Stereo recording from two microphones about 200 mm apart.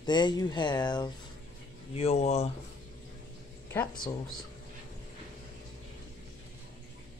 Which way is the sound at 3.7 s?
15° left (ahead or behind).